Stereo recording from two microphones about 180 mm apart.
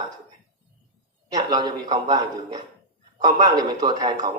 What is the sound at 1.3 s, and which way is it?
A man's voice, 20° right (ahead or behind).